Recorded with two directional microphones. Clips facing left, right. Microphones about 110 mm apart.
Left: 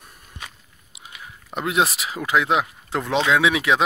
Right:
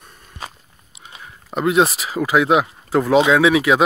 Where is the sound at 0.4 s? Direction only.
35° right (ahead or behind).